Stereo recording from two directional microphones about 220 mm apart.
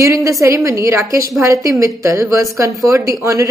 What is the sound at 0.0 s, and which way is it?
Speech, 15° right (ahead or behind).